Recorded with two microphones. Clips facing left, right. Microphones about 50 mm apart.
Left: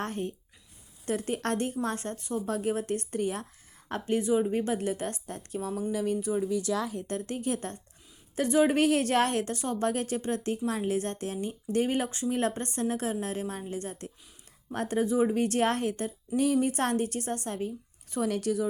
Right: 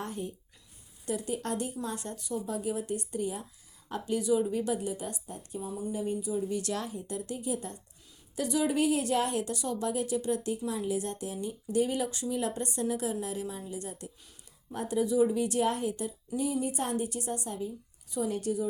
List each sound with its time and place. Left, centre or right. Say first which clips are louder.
0.0 s speech: left 4 dB; left
2.5 s a woman's voice: left 4 dB; left
3.8 s speech: left 1 dB; left
4.8 s a woman's voice: left 4 dB; left
5.9 s speech: left 3 dB; left
7.1 s a woman's voice: even; left
8.4 s speech: left 4 dB; left
16.4 s a woman's voice: left 5 dB; left
18.3 s speech: left 3 dB; left